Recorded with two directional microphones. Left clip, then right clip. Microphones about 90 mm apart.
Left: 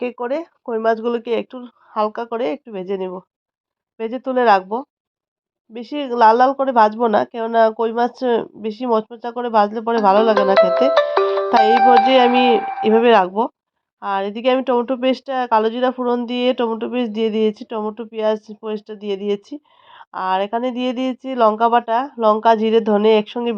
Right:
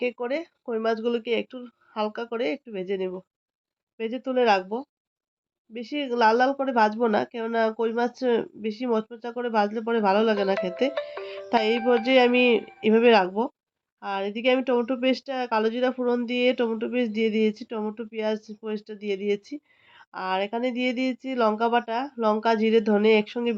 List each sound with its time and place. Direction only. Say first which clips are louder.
0.0 s speech: left 5 dB; 35° left (ahead or behind)
11.9 s speech: left 8 dB; 30° left (ahead or behind)